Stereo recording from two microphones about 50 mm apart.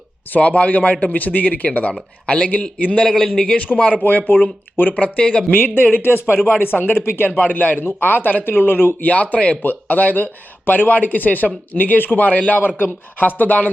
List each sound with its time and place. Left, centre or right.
0.3 s speech: left
1.9 s speech: centre
3.0 s a man's voice: centre
3.7 s speech: left
4.3 s a man's voice: left
4.9 s speech: left
5.5 s a man's voice: left
7.3 s a man's voice: left
9.0 s speech: left